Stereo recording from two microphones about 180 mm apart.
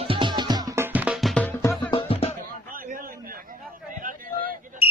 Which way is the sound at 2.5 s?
50° right (ahead or behind).